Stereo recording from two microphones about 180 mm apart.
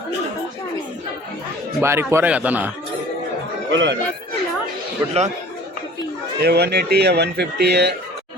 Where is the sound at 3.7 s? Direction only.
90° right.